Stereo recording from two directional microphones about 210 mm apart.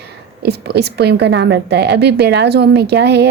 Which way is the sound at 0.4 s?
50° right (ahead or behind).